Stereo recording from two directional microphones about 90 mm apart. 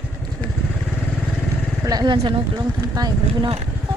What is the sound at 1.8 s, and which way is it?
Vehicle, 45° right (ahead or behind).